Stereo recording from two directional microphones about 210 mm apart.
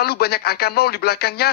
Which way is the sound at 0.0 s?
50° left (ahead or behind).